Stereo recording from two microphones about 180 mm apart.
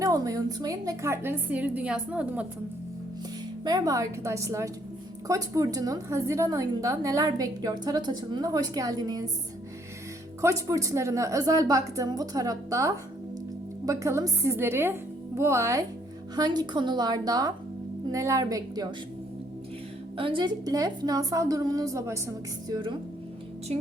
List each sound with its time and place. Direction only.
0.0 s a woman's voice: 20° right (ahead or behind)
3.6 s a woman's voice: 20° right (ahead or behind)
10.4 s a woman's voice: 20° right (ahead or behind)
20.1 s a woman's voice: 30° right (ahead or behind)